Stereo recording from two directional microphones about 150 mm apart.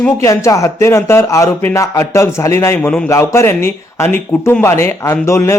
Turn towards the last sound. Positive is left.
turn(degrees=20)  # may be behind; listen again after turning